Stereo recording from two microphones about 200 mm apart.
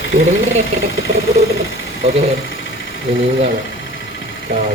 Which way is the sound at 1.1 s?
35° right (ahead or behind).